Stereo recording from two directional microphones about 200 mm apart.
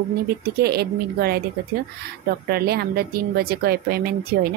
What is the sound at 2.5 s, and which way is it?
A woman's voice, 50° right (ahead or behind).